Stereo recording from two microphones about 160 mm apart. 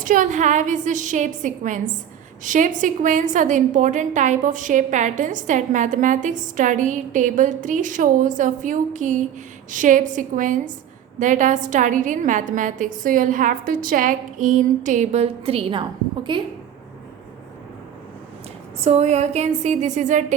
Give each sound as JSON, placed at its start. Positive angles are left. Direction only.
{"t": 0.0, "sound": "a woman's voice", "side_deg": -55}
{"t": 18.8, "sound": "a woman's voice", "side_deg": -45}